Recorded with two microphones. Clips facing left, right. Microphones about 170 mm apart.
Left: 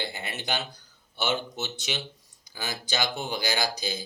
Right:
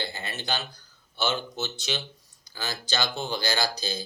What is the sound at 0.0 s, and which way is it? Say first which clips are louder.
Speech: even; 15° left (ahead or behind).